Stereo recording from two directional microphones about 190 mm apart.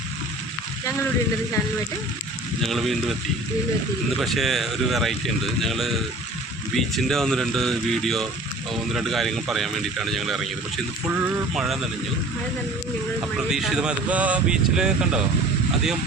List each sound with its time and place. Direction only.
2.6 s speech: centre (ahead or behind)
13.5 s speech: centre (ahead or behind)